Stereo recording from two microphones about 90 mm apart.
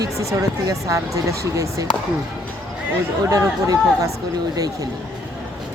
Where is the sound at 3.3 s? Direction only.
35° right (ahead or behind).